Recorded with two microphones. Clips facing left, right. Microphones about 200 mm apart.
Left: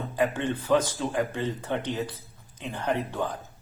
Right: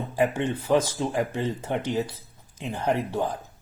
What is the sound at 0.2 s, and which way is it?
Speech, 25° right (ahead or behind).